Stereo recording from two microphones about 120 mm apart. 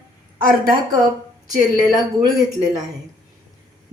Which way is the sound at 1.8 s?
35° right (ahead or behind).